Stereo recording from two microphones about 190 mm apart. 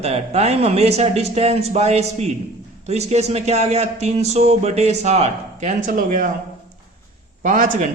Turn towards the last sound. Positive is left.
turn(degrees=-45)  # may be behind; listen again after turning